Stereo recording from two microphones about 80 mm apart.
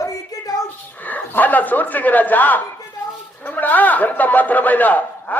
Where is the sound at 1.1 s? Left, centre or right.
Left.